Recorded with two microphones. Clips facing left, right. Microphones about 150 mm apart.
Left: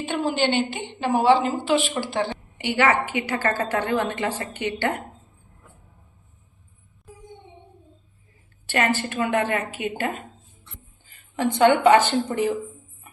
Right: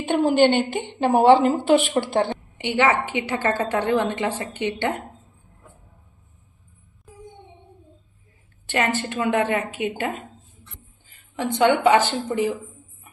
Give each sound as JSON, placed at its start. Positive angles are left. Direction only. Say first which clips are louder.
{"t": 0.0, "sound": "a woman's voice", "louder": "right 6 dB", "side_deg": -50}
{"t": 2.6, "sound": "a woman's voice", "louder": "right 1 dB", "side_deg": -20}
{"t": 8.6, "sound": "a woman's voice", "louder": "even", "side_deg": -20}
{"t": 11.6, "sound": "speech", "louder": "left 1 dB", "side_deg": -15}